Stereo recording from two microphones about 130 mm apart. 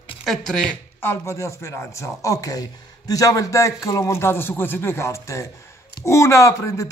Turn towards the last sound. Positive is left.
turn(degrees=25)  # may be behind; listen again after turning